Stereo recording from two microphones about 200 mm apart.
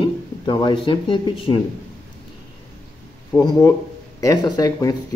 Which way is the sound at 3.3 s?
15° left (ahead or behind).